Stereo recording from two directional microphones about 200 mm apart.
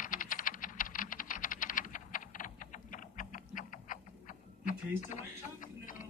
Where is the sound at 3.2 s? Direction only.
40° left (ahead or behind).